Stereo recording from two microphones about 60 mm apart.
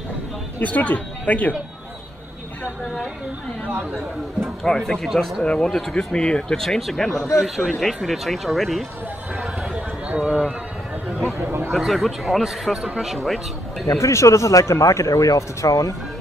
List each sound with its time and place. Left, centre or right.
0.6 s speech: left
4.4 s speech: centre
5.4 s speech: centre
7.4 s a man's voice: centre
9.4 s horse: centre
11.4 s speech: right
11.8 s speech: centre
13.9 s speech: left